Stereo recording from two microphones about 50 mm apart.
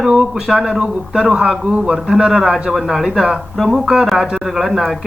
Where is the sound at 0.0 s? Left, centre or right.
Centre.